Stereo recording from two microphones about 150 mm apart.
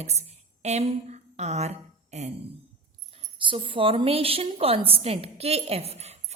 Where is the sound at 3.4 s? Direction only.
35° right (ahead or behind).